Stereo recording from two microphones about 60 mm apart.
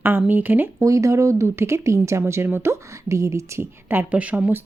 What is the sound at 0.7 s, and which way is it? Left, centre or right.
Speech, right.